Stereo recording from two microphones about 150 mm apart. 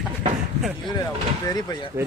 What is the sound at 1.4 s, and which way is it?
Speech, 25° left (ahead or behind).